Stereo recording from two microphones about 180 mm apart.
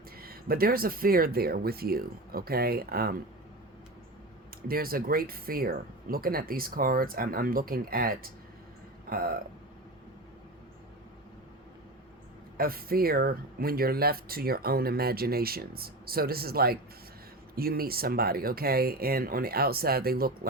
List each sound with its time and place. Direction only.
0.2 s speech: 55° right (ahead or behind)
4.7 s speech: 55° right (ahead or behind)
12.5 s speech: 55° right (ahead or behind)